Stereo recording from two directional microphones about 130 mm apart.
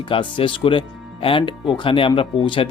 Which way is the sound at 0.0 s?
40° left (ahead or behind).